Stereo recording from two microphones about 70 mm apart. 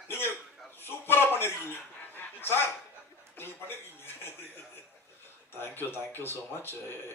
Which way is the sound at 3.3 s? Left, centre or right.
Left.